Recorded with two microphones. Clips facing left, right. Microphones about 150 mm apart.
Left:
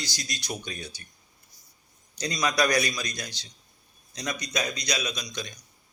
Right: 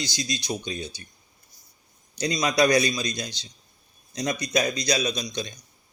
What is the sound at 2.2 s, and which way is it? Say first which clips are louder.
Speech: right 4 dB; 20° right (ahead or behind).